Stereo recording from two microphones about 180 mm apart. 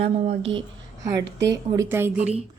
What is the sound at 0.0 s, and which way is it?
Speech, 30° right (ahead or behind).